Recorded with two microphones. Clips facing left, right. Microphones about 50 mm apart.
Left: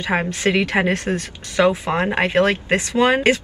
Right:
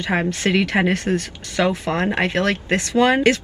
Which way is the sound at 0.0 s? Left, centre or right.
Centre.